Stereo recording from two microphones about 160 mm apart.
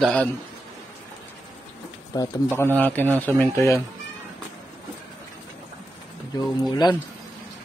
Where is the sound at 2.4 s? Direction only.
15° left (ahead or behind).